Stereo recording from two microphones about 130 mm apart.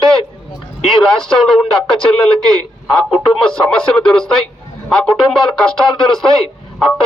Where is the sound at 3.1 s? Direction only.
Centre (ahead or behind).